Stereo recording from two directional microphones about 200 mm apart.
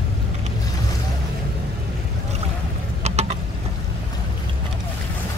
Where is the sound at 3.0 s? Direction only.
35° right (ahead or behind).